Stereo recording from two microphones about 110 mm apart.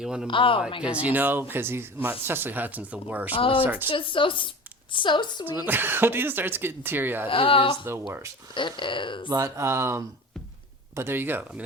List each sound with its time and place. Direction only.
0.0 s speech: 5° right (ahead or behind)
0.3 s speech: 50° left (ahead or behind)
1.0 s speech: 15° right (ahead or behind)
3.3 s speech: 55° left (ahead or behind)
3.6 s speech: 15° right (ahead or behind)
3.8 s speech: 50° left (ahead or behind)
5.5 s speech: 20° right (ahead or behind)
7.3 s speech: 55° left (ahead or behind)
9.3 s speech: 30° right (ahead or behind)